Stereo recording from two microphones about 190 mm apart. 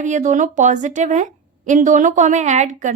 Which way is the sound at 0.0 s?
40° right (ahead or behind).